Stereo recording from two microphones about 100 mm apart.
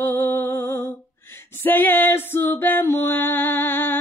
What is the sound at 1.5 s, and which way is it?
Music, 20° left (ahead or behind).